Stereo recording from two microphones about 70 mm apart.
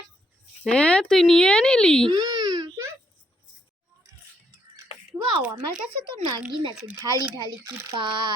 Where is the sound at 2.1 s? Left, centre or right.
Right.